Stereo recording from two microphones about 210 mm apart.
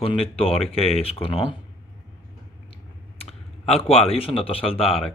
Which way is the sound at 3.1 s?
30° left (ahead or behind).